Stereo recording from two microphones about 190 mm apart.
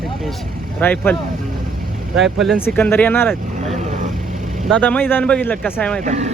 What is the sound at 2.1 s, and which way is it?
Speech, centre (ahead or behind).